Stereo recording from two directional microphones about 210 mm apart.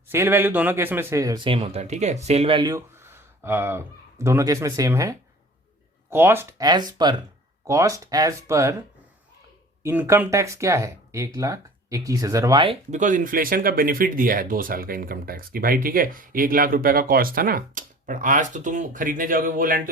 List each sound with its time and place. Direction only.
0.1 s speech: 10° right (ahead or behind)
1.5 s speech: 30° right (ahead or behind)
9.8 s speech: 10° right (ahead or behind)
12.9 s speech: 35° right (ahead or behind)